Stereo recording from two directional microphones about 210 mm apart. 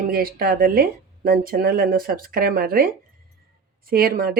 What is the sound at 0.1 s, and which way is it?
Speech, 45° right (ahead or behind).